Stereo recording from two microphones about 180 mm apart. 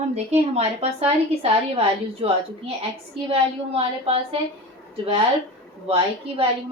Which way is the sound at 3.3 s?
30° right (ahead or behind).